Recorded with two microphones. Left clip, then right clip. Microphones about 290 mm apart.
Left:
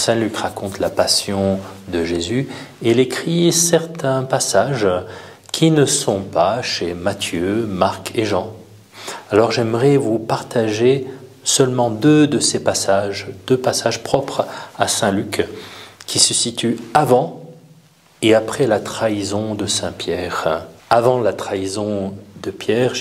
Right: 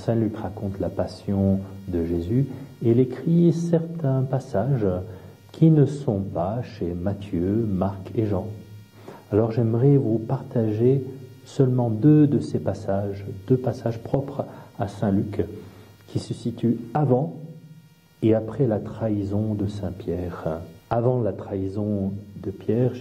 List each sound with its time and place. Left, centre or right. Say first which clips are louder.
0.0 s speech: left 8 dB; centre
6.0 s speech: left 9 dB; left
6.4 s speech: left 11 dB; centre
11.7 s speech: left 9 dB; left
12.0 s speech: left 4 dB; centre
18.2 s speech: left 8 dB; centre
21.8 s speech: left 7 dB; left
22.4 s speech: left 7 dB; centre